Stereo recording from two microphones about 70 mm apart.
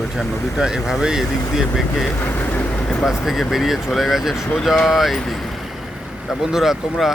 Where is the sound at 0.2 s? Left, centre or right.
Centre.